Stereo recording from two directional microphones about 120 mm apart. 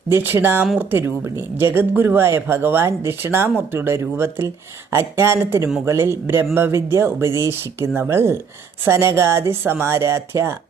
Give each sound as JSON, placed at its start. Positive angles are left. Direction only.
{"t": 0.1, "sound": "speech", "side_deg": -20}